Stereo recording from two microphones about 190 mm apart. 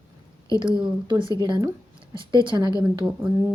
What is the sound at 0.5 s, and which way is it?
Speech, 25° right (ahead or behind).